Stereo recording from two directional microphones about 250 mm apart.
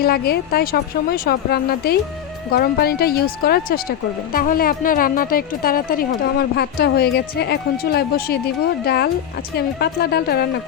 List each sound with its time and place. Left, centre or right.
0.0 s speech: left